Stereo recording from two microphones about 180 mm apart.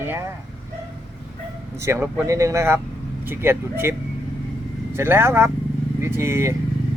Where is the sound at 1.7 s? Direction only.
15° right (ahead or behind).